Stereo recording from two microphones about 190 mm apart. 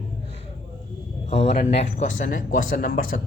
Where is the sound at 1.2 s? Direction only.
35° left (ahead or behind).